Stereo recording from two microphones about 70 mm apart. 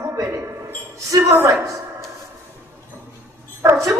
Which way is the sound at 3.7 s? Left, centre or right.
Right.